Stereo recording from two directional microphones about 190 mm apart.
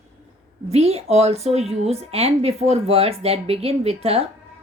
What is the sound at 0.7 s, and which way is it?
Speech, 35° right (ahead or behind).